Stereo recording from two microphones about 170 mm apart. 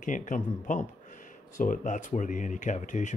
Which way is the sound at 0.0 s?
50° left (ahead or behind).